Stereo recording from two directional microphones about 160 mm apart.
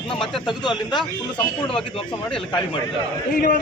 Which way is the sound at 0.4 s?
30° left (ahead or behind).